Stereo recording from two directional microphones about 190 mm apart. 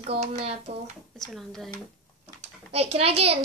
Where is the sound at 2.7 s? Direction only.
30° right (ahead or behind).